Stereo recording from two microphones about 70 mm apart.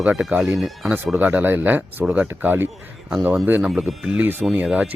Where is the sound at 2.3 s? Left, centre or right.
Right.